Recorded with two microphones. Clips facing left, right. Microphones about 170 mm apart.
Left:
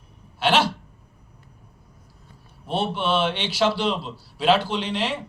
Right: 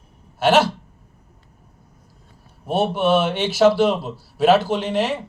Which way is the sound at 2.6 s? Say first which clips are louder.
Right 6 dB; 50° right (ahead or behind).